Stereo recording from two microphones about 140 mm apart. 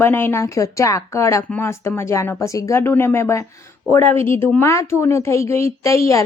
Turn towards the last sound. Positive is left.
turn(degrees=20)  # may be behind; listen again after turning